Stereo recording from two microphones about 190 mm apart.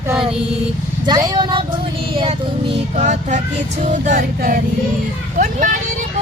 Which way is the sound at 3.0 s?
40° right (ahead or behind).